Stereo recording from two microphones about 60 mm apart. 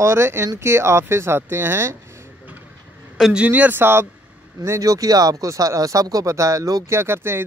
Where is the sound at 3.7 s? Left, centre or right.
Right.